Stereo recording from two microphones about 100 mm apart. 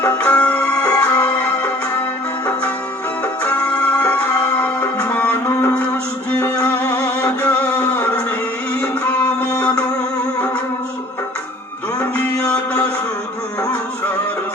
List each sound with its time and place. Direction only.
0.0 s music: 15° left (ahead or behind)
3.4 s music: 15° left (ahead or behind)
11.9 s music: 15° left (ahead or behind)